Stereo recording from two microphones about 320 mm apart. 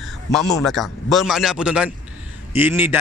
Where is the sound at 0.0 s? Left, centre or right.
Centre.